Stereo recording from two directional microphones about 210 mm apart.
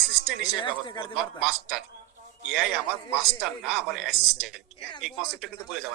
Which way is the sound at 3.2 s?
Centre (ahead or behind).